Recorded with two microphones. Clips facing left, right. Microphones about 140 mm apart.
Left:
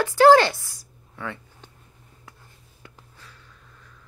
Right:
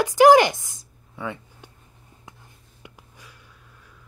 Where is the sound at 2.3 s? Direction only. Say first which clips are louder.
Right 2 dB; 20° right (ahead or behind).